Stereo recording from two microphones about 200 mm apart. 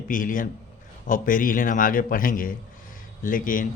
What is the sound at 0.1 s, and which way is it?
A man's voice, 40° left (ahead or behind).